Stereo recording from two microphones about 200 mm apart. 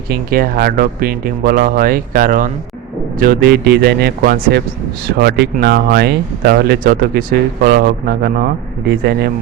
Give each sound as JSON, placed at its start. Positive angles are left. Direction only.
{"t": 0.1, "sound": "speech", "side_deg": -50}